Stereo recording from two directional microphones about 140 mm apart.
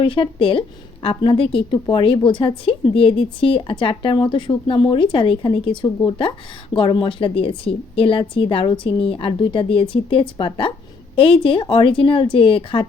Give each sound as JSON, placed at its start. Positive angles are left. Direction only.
{"t": 0.0, "sound": "a woman's voice", "side_deg": 40}